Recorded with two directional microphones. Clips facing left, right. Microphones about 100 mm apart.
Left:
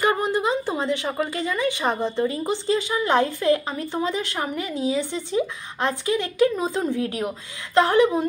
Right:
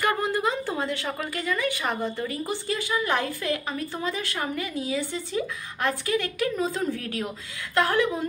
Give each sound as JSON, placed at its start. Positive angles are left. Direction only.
{"t": 0.0, "sound": "speech", "side_deg": 20}